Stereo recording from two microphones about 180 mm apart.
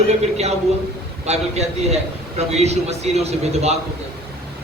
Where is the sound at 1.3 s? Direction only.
35° right (ahead or behind).